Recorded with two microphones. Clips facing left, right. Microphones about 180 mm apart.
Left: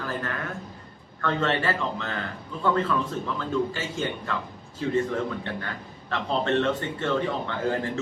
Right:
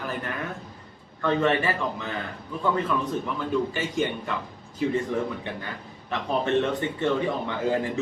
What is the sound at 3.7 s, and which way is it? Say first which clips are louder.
A man's voice: right 3 dB; 15° right (ahead or behind).